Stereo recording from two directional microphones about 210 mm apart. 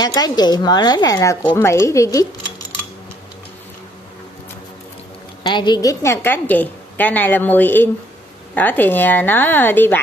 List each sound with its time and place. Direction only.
0.0 s speech: 20° left (ahead or behind)
5.4 s a woman's voice: 20° left (ahead or behind)